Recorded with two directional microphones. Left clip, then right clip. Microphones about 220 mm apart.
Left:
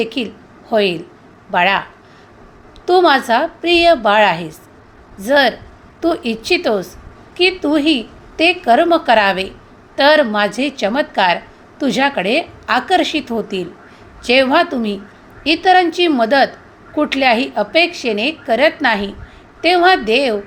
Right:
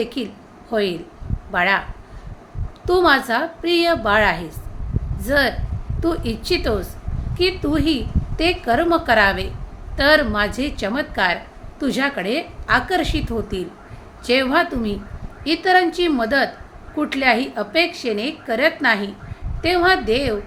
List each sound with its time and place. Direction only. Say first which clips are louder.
0.0 s a woman's voice: left 5 dB; 15° left (ahead or behind)
2.8 s a woman's voice: left 4 dB; 15° left (ahead or behind)